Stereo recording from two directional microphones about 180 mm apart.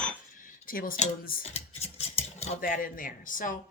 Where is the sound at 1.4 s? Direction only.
35° left (ahead or behind).